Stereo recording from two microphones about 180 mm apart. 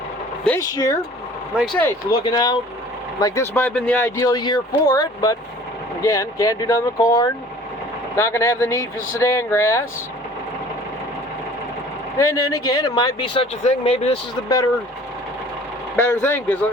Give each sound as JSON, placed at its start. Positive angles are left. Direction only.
{"t": 0.6, "sound": "speech", "side_deg": 20}
{"t": 1.5, "sound": "speech", "side_deg": 5}
{"t": 2.0, "sound": "speech", "side_deg": 20}
{"t": 4.3, "sound": "speech", "side_deg": 25}
{"t": 12.1, "sound": "speech", "side_deg": 15}
{"t": 16.0, "sound": "speech", "side_deg": 10}